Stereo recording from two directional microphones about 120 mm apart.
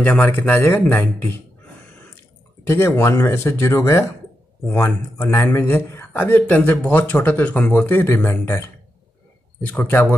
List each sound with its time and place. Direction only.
0.0 s speech: 15° left (ahead or behind)
2.6 s speech: 20° left (ahead or behind)
9.7 s speech: 15° left (ahead or behind)